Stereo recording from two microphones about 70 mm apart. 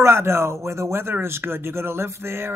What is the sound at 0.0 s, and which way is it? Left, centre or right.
Speech, right.